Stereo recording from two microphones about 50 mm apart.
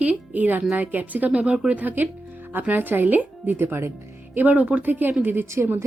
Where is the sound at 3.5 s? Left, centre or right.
Right.